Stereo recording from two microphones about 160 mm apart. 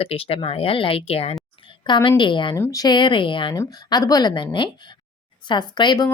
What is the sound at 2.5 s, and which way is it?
Speech, 20° left (ahead or behind).